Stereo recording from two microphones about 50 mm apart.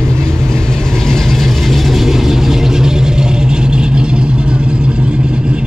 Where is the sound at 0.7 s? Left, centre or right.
Centre.